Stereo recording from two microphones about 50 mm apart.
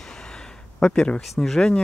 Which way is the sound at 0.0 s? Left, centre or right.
Centre.